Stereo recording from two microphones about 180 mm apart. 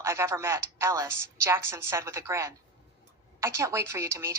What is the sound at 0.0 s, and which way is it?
A woman's voice, 15° right (ahead or behind).